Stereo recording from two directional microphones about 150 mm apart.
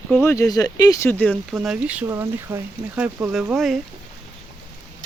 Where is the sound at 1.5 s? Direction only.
5° right (ahead or behind).